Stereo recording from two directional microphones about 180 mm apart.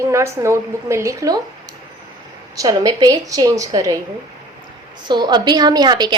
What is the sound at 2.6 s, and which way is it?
A woman's voice, 20° right (ahead or behind).